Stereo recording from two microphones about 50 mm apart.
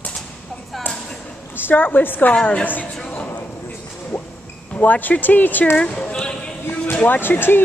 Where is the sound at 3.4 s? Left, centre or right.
Left.